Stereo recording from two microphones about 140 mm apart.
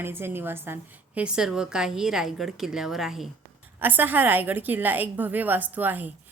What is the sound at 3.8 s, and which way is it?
Speech, 15° right (ahead or behind).